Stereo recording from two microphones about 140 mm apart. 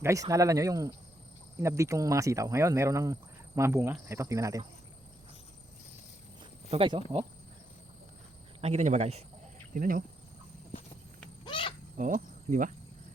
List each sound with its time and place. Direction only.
0.0 s speech: 25° right (ahead or behind)
6.4 s speech: 40° right (ahead or behind)
8.6 s a man's voice: 55° right (ahead or behind)
9.7 s speech: 80° right
11.4 s cricket: 35° left (ahead or behind)
11.9 s cricket: 65° right (ahead or behind)